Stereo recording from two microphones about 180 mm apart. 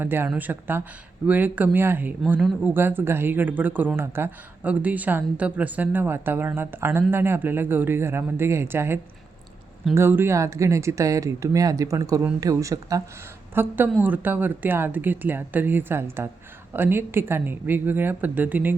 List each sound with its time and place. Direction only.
0.0 s speech: 10° right (ahead or behind)